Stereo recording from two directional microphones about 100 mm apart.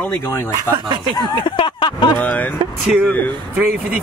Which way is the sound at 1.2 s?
55° left (ahead or behind).